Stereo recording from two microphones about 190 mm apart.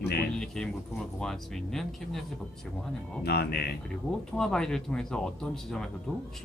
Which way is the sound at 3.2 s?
60° left (ahead or behind).